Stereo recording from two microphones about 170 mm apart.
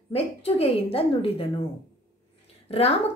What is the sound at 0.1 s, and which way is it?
A woman's voice, 35° left (ahead or behind).